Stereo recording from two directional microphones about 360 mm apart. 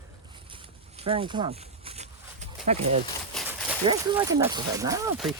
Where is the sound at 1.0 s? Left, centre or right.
Centre.